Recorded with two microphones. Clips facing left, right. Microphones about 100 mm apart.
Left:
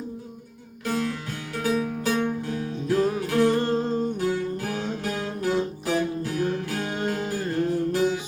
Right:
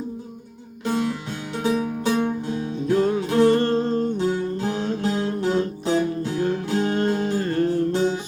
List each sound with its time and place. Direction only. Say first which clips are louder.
0.9 s music: right 3 dB; 25° right (ahead or behind)
3.5 s music: right 4 dB; 10° left (ahead or behind)
4.2 s music: right 3 dB; 25° right (ahead or behind)
5.0 s guitar: right 4 dB; 20° right (ahead or behind)
5.8 s music: right 3 dB; 25° right (ahead or behind)
7.3 s music: right 4 dB; 10° left (ahead or behind)